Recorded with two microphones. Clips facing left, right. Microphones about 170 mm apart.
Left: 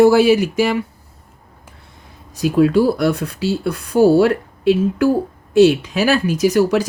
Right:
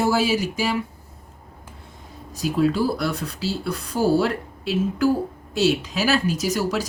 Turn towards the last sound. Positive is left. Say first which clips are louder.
# left 9 dB
turn(degrees=60)  # may be behind; listen again after turning